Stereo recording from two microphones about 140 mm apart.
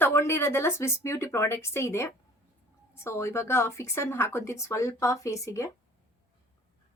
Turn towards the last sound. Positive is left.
turn(degrees=20)  # may be behind; listen again after turning